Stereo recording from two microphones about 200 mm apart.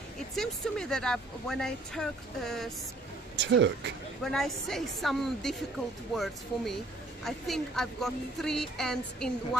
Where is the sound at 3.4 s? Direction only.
60° right (ahead or behind).